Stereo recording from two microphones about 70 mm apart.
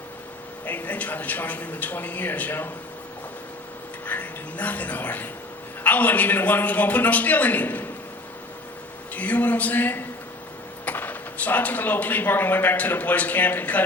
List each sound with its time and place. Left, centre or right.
0.6 s speech: left
4.0 s speech: left
9.1 s speech: left